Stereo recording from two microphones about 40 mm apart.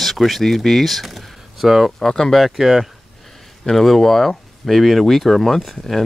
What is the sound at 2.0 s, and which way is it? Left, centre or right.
Speech, centre.